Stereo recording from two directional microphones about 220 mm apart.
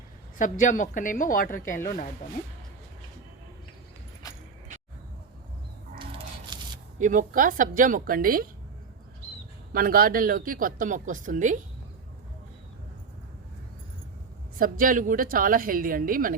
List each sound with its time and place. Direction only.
0.3 s a woman's voice: 35° left (ahead or behind)
6.0 s a sound: 25° right (ahead or behind)
7.0 s speech: 35° right (ahead or behind)
9.7 s speech: 40° right (ahead or behind)
14.6 s speech: 40° right (ahead or behind)